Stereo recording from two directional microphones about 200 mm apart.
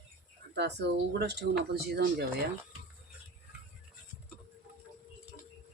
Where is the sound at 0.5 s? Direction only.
55° right (ahead or behind).